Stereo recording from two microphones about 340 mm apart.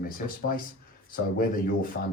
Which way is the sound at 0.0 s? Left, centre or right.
Left.